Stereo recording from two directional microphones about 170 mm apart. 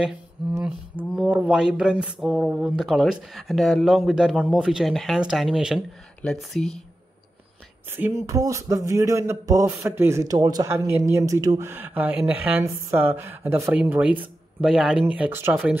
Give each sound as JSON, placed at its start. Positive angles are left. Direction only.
{"t": 0.0, "sound": "speech", "side_deg": -5}
{"t": 7.9, "sound": "speech", "side_deg": -15}